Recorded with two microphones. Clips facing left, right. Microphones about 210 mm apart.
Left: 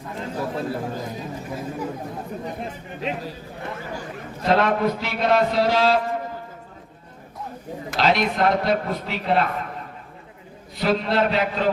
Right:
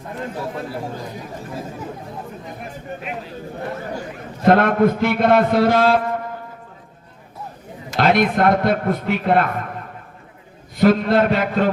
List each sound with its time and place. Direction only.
0.3 s a man's voice: 25° left (ahead or behind)
4.4 s a man's voice: 55° right (ahead or behind)
7.9 s a man's voice: 55° right (ahead or behind)
10.8 s a man's voice: 50° right (ahead or behind)